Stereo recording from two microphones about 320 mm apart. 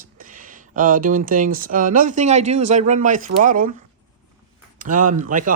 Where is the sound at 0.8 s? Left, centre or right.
Right.